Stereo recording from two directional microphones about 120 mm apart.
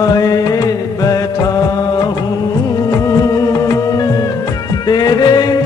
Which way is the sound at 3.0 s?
30° left (ahead or behind).